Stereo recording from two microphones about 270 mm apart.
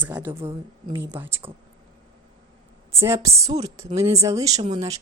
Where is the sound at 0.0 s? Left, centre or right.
Centre.